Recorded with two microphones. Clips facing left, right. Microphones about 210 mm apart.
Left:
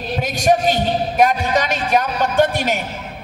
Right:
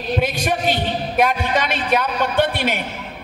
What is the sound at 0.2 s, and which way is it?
A man's voice, 45° left (ahead or behind).